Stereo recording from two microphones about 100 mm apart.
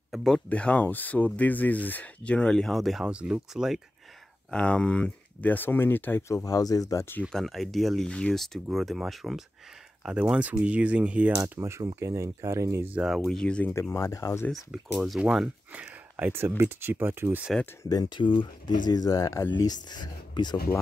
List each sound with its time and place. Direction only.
0.1 s speech: 5° left (ahead or behind)
0.5 s speech: 15° left (ahead or behind); by 3.8 s 5° right (ahead or behind)
4.5 s speech: 10° left (ahead or behind); by 7.1 s 35° left (ahead or behind)
7.3 s speech: centre (ahead or behind)
11.4 s speech: 25° right (ahead or behind)
12.9 s speech: 5° right (ahead or behind)
13.7 s speech: 30° left (ahead or behind)
14.5 s speech: centre (ahead or behind)
15.8 s speech: 20° right (ahead or behind)
17.8 s speech: 40° left (ahead or behind)
18.2 s speech: 55° left (ahead or behind)